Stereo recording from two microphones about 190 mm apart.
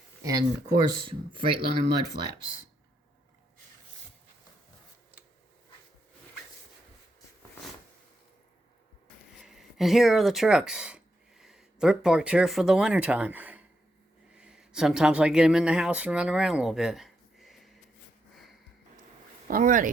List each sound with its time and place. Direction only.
0.2 s speech: 20° right (ahead or behind)
9.4 s speech: centre (ahead or behind)
19.5 s speech: 45° right (ahead or behind)